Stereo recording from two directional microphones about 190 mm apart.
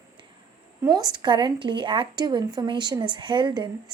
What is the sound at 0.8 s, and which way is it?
A woman's voice, 20° right (ahead or behind).